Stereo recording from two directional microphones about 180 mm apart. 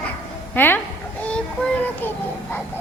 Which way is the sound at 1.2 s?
5° left (ahead or behind).